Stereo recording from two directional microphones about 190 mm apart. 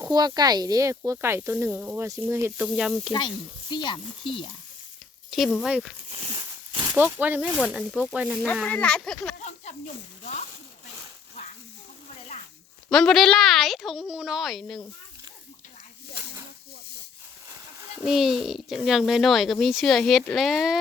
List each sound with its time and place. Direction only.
0.0 s speech: 20° right (ahead or behind); by 3.1 s centre (ahead or behind)
3.1 s speech: 25° left (ahead or behind)
5.3 s a child's voice: centre (ahead or behind)
6.1 s a sound: 30° right (ahead or behind)
6.3 s a sound: 20° right (ahead or behind)
6.9 s a child's voice: 10° right (ahead or behind)
8.6 s a child's voice: 5° left (ahead or behind)
12.9 s a child's voice: centre (ahead or behind)
17.9 s a child's voice: 5° right (ahead or behind)